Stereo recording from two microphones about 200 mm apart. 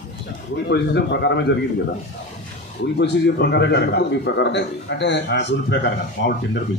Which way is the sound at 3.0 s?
60° left (ahead or behind).